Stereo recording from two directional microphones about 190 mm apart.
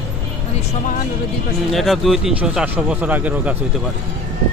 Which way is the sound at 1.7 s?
Centre (ahead or behind).